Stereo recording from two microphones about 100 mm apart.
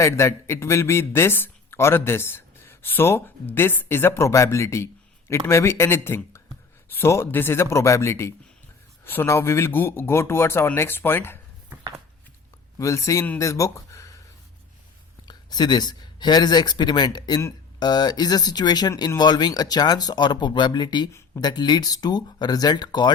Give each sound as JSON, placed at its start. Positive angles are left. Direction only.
{"t": 0.0, "sound": "speech", "side_deg": 30}
{"t": 12.8, "sound": "speech", "side_deg": 30}
{"t": 15.3, "sound": "speech", "side_deg": 45}
{"t": 21.1, "sound": "speech", "side_deg": 30}
{"t": 21.4, "sound": "speech", "side_deg": 45}